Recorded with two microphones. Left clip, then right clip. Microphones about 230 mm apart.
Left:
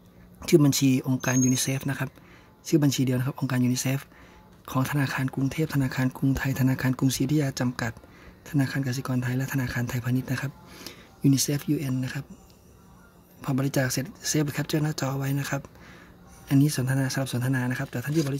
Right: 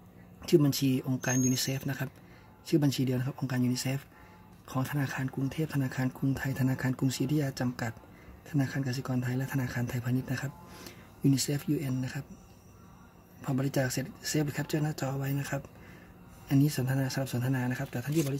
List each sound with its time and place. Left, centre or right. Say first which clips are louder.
0.4 s speech: left 5 dB; centre
13.4 s speech: left 4 dB; centre